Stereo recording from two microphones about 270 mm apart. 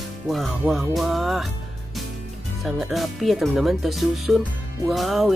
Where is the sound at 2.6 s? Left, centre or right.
Centre.